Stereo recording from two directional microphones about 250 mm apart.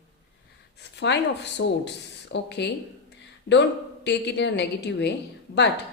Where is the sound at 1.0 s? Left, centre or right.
Left.